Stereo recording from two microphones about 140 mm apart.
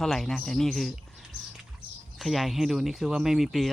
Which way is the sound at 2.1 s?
Centre (ahead or behind).